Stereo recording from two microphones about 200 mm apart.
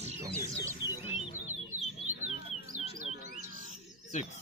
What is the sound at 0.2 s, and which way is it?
Music, 15° right (ahead or behind).